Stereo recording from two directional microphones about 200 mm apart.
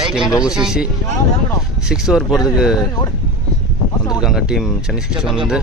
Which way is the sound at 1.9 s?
Centre (ahead or behind).